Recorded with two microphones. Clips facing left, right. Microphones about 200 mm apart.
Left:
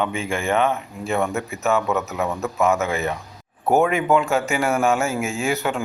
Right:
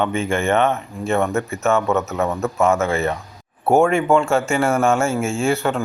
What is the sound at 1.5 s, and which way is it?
Speech, centre (ahead or behind).